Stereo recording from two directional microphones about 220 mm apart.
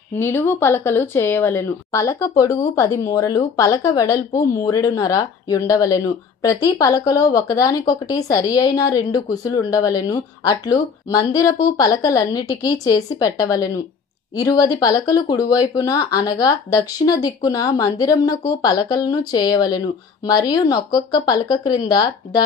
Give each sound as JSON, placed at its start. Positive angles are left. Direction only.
{"t": 0.2, "sound": "a woman's voice", "side_deg": 10}